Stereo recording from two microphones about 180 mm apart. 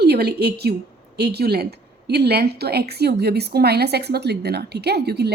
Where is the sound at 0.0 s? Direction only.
65° right (ahead or behind).